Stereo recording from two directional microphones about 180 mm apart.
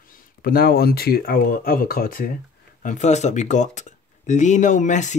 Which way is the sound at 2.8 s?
40° left (ahead or behind).